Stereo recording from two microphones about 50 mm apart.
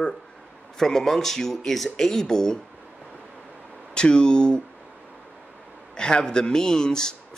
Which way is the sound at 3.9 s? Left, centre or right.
Centre.